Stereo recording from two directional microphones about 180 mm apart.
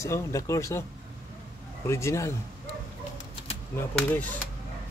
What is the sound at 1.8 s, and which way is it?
Speech, 15° left (ahead or behind).